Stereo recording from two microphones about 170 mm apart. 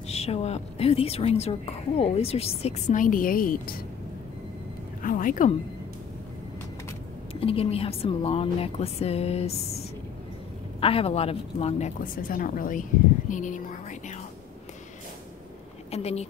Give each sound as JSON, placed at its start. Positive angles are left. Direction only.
{"t": 0.1, "sound": "a woman's voice", "side_deg": 40}
{"t": 5.0, "sound": "speech", "side_deg": 50}
{"t": 7.3, "sound": "a woman's voice", "side_deg": 35}
{"t": 10.8, "sound": "a woman's voice", "side_deg": 35}
{"t": 12.0, "sound": "speech", "side_deg": 55}
{"t": 15.9, "sound": "a woman's voice", "side_deg": 40}